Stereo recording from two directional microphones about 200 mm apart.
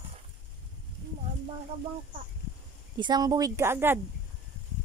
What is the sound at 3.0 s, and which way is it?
Speech, 20° right (ahead or behind).